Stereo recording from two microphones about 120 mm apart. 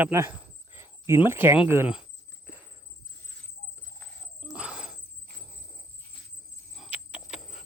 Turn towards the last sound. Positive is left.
turn(degrees=-5)  # may be behind; listen again after turning